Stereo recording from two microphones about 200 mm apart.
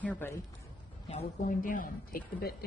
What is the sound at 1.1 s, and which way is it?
A woman's voice, 35° left (ahead or behind).